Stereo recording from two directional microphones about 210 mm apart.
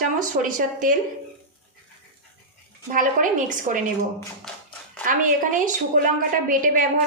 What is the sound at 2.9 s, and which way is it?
Speech, 40° right (ahead or behind).